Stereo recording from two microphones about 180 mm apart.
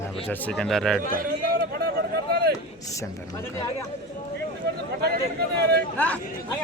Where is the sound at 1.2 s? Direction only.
60° right (ahead or behind).